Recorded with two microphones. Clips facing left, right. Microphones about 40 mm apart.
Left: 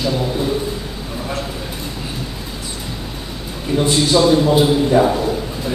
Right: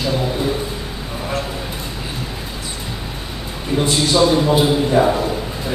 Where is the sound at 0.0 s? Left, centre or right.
Centre.